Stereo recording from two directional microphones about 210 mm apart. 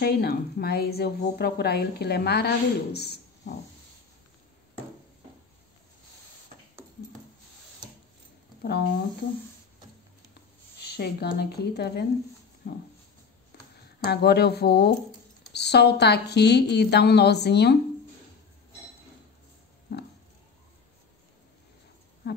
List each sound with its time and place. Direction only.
0.0 s a woman's voice: 50° left (ahead or behind)
10.8 s a woman's voice: 50° left (ahead or behind)
14.0 s a woman's voice: 50° left (ahead or behind)
19.9 s a sound: 50° left (ahead or behind)